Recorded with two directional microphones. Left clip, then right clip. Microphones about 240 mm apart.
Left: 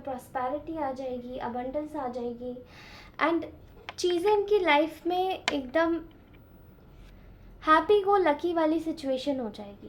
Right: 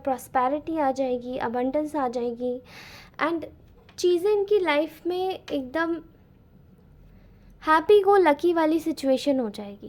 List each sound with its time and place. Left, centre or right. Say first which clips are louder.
0.0 s a woman's voice: right 8 dB; right
7.6 s a woman's voice: right 4 dB; right